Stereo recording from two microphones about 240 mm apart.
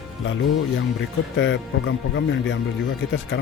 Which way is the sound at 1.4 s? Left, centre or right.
Left.